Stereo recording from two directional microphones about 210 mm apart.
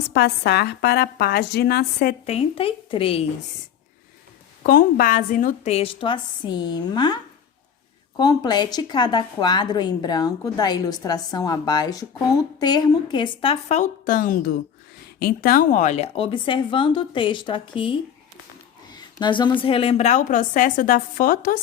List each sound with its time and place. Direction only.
0.1 s a woman's voice: 50° left (ahead or behind)
2.2 s a woman's voice: 30° left (ahead or behind)
4.6 s a woman's voice: 40° left (ahead or behind)